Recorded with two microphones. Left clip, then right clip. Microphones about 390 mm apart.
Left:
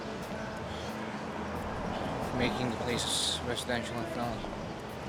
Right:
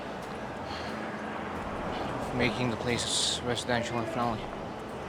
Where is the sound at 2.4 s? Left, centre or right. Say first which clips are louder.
Right 4 dB; right.